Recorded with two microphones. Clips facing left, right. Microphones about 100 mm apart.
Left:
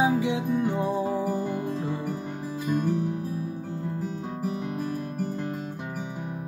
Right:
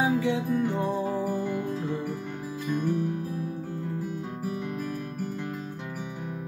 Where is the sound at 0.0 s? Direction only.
15° left (ahead or behind).